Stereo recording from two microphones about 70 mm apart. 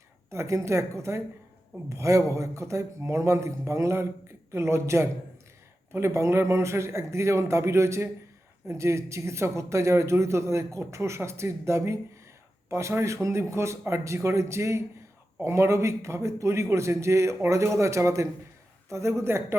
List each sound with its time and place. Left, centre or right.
0.3 s a man's voice: right